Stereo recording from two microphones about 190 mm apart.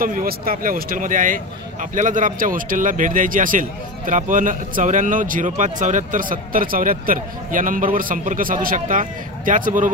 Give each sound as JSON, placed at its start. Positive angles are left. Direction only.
{"t": 0.0, "sound": "speech", "side_deg": -50}